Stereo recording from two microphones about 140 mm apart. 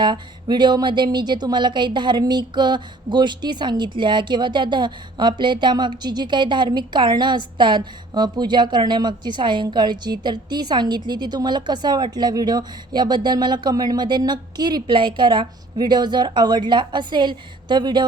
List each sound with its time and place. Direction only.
0.0 s speech: 30° right (ahead or behind)